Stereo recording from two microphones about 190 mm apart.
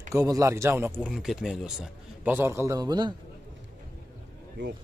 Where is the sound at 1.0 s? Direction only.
Centre (ahead or behind); by 3.1 s 20° right (ahead or behind).